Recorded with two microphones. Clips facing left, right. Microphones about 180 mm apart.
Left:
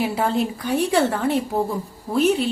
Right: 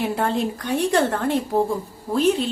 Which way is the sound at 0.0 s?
5° left (ahead or behind).